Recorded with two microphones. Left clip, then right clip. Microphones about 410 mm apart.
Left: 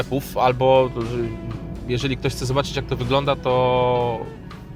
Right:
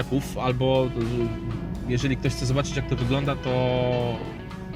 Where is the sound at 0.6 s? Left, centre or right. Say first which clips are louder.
Left 6 dB; left.